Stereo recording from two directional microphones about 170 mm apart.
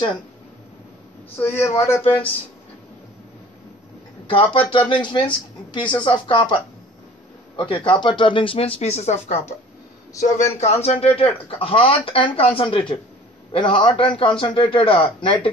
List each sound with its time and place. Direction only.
1.3 s a man's voice: 15° left (ahead or behind)
2.0 s speech: 35° left (ahead or behind)
4.3 s speech: 30° left (ahead or behind)
10.6 s speech: 40° left (ahead or behind)